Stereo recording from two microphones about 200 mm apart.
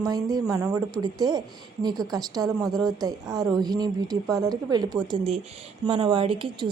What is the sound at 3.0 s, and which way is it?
Speech, 20° right (ahead or behind).